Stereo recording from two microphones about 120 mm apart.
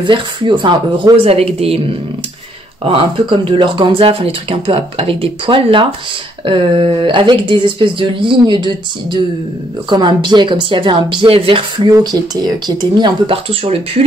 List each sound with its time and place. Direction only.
0.0 s speech: 40° right (ahead or behind)
1.1 s speech: 55° right (ahead or behind)
11.8 s speech: 35° right (ahead or behind); by 13.7 s 50° right (ahead or behind)